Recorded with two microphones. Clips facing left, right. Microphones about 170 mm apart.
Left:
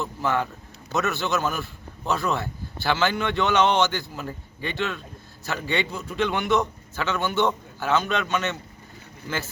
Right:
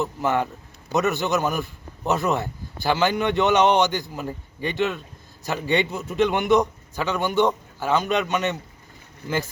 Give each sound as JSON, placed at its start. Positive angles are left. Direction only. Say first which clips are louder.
{"t": 0.0, "sound": "a man's voice", "louder": "right 3 dB", "side_deg": -15}